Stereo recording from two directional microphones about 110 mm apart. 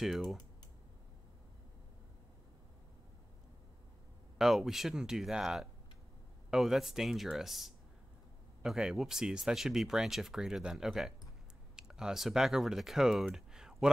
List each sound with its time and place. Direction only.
0.0 s speech: centre (ahead or behind)
4.4 s speech: 5° right (ahead or behind)